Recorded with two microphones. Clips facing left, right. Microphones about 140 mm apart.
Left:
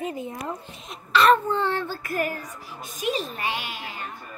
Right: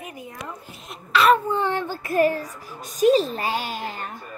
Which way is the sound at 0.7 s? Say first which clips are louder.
Right 3 dB; centre (ahead or behind).